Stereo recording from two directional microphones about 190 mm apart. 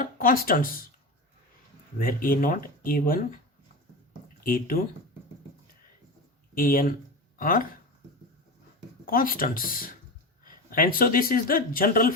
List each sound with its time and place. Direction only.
0.0 s speech: 50° left (ahead or behind)
2.0 s speech: 50° left (ahead or behind)
4.4 s speech: 50° left (ahead or behind)
6.5 s speech: 50° left (ahead or behind)
9.0 s speech: 50° left (ahead or behind)